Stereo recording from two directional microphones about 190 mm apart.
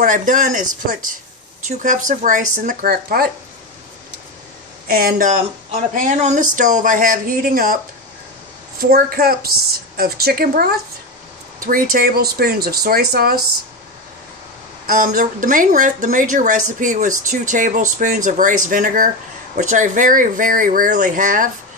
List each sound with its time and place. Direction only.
0.0 s a woman's voice: 45° right (ahead or behind)
4.8 s a woman's voice: 50° right (ahead or behind)
14.9 s a woman's voice: 45° right (ahead or behind)